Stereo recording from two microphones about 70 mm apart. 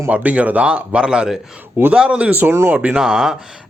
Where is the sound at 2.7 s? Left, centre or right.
Centre.